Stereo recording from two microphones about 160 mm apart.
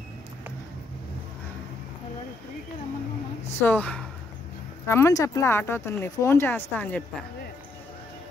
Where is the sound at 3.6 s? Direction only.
10° left (ahead or behind).